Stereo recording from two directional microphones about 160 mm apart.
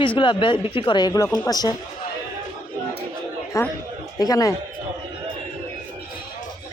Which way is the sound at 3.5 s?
20° left (ahead or behind).